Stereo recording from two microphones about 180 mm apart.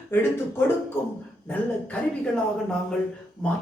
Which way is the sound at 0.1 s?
10° left (ahead or behind).